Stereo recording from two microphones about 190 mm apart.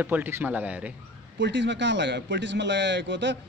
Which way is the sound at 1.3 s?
70° right (ahead or behind).